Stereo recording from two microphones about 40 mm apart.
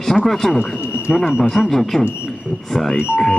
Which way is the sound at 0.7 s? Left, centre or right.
Right.